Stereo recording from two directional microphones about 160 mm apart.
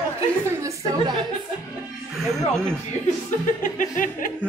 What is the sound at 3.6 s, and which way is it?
Music, 55° left (ahead or behind).